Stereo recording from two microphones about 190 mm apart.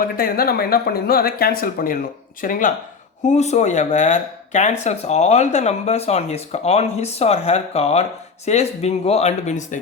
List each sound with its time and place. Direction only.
0.0 s speech: 50° left (ahead or behind)